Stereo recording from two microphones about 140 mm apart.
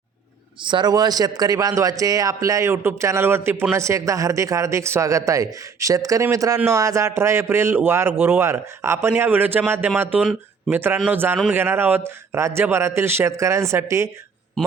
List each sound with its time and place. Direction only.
0.6 s a man's voice: 35° right (ahead or behind)